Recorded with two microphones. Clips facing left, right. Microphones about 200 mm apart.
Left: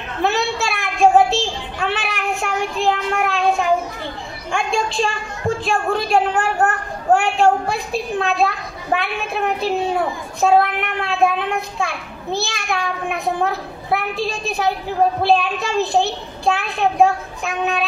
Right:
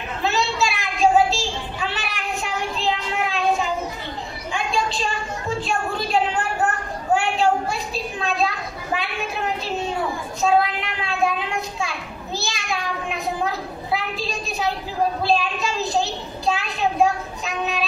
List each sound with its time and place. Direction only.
0.2 s child singing: 60° left (ahead or behind)
5.6 s a sound: 55° left (ahead or behind)
10.4 s a child's voice: 60° left (ahead or behind)